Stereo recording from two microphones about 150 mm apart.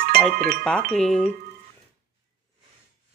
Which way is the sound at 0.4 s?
80° right.